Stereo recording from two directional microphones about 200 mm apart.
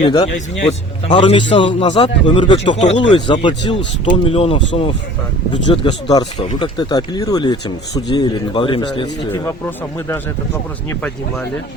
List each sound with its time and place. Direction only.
0.0 s a man's voice: 20° left (ahead or behind)
0.3 s speech: 35° left (ahead or behind)
1.1 s a man's voice: 25° left (ahead or behind)
3.1 s a man's voice: 25° left (ahead or behind)
9.3 s speech: 10° left (ahead or behind)